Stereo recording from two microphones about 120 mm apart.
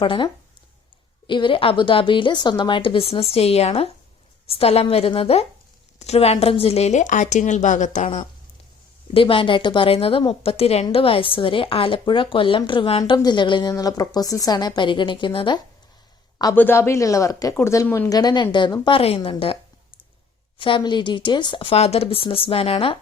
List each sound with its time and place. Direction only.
0.0 s a woman's voice: 45° left (ahead or behind)
1.3 s a woman's voice: 45° left (ahead or behind); by 8.2 s 80° left
9.1 s a woman's voice: 50° left (ahead or behind)
16.6 s speech: 20° left (ahead or behind)
17.8 s speech: 15° left (ahead or behind)
18.1 s a woman's voice: 35° left (ahead or behind); by 19.5 s 50° left (ahead or behind)
20.6 s a woman's voice: 45° left (ahead or behind)